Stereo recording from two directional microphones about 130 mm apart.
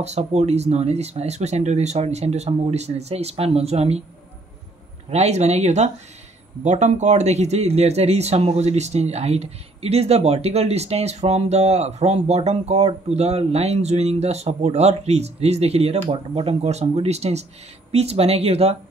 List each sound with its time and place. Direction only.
0.0 s speech: 55° right (ahead or behind)
5.1 s speech: 60° right (ahead or behind)